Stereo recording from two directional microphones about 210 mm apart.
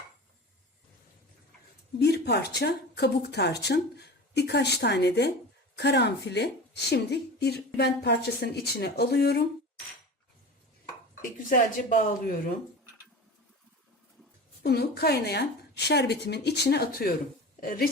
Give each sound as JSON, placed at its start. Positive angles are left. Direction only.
{"t": 2.0, "sound": "speech", "side_deg": 50}
{"t": 11.2, "sound": "speech", "side_deg": 40}
{"t": 14.6, "sound": "a woman's voice", "side_deg": 50}